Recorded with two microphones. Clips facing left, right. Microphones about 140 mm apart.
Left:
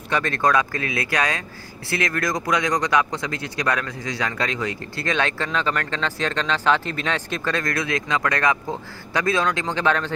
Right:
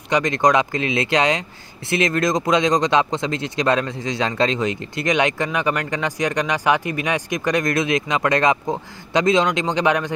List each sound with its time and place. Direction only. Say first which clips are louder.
0.1 s speech: right 4 dB; 15° right (ahead or behind)